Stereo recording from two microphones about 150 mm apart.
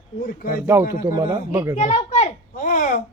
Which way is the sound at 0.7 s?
20° right (ahead or behind).